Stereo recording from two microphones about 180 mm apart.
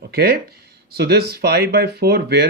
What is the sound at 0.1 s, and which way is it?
Speech, 60° right (ahead or behind).